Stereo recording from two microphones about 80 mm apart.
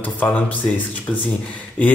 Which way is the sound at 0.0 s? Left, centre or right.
Left.